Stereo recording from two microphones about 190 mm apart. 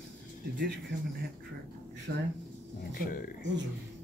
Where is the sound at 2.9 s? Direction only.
50° left (ahead or behind).